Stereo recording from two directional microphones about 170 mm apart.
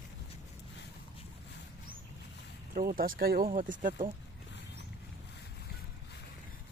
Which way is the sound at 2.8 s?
55° right (ahead or behind).